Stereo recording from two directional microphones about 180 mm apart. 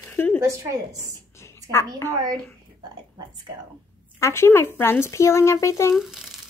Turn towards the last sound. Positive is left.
turn(degrees=0)  # may be behind; listen again after turning